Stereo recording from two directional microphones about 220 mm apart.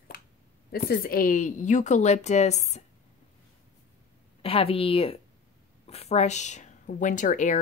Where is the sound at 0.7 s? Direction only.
45° left (ahead or behind).